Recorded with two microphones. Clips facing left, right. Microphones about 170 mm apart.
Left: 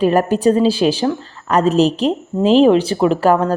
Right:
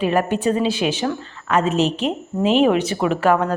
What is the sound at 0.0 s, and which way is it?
A woman's voice, 40° left (ahead or behind).